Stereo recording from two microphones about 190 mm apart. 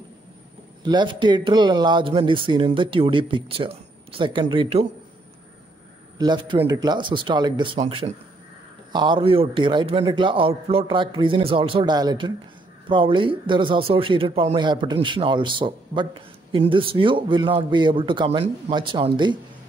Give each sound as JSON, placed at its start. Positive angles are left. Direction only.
{"t": 0.8, "sound": "speech", "side_deg": -25}
{"t": 6.1, "sound": "speech", "side_deg": -25}